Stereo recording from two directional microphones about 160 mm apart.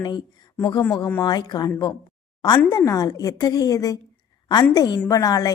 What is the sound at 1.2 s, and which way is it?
A woman's voice, 25° left (ahead or behind).